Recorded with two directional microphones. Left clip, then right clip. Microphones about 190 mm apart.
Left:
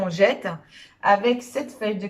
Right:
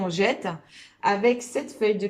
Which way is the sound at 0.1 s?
20° right (ahead or behind).